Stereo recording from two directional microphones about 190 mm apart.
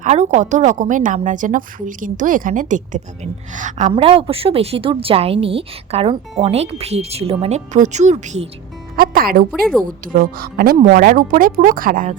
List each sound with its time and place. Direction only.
0.0 s a woman's voice: 40° right (ahead or behind)
9.0 s speech: 50° right (ahead or behind)
9.5 s a woman's voice: centre (ahead or behind)
9.8 s speech: 50° right (ahead or behind)